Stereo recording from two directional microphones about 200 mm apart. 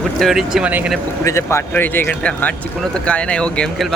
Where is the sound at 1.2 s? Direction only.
15° left (ahead or behind).